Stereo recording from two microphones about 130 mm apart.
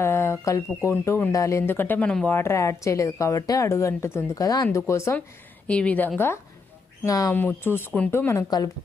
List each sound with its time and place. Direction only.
0.0 s a sound: 20° left (ahead or behind)
0.7 s speech: 20° left (ahead or behind)
5.7 s speech: 10° left (ahead or behind)
7.1 s speech: 25° left (ahead or behind)
7.3 s speech: 15° left (ahead or behind)
8.3 s speech: 25° left (ahead or behind)